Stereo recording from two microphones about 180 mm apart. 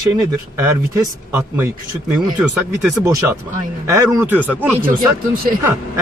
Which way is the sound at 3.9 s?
15° right (ahead or behind).